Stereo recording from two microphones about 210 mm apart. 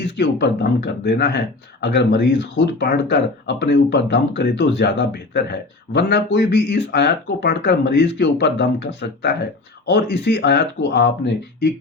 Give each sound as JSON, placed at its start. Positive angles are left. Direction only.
{"t": 0.2, "sound": "speech", "side_deg": 55}